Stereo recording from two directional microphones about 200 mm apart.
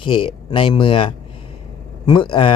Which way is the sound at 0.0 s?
25° left (ahead or behind).